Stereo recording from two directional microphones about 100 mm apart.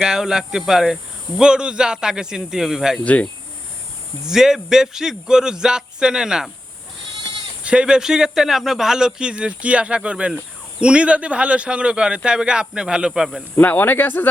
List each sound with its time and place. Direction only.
0.0 s speech: 5° right (ahead or behind)
3.0 s speech: 15° left (ahead or behind)
4.3 s speech: 5° right (ahead or behind)
7.6 s speech: 10° right (ahead or behind)
13.6 s speech: 20° left (ahead or behind)